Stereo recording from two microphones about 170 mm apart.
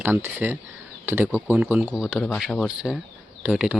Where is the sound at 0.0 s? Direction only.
10° right (ahead or behind).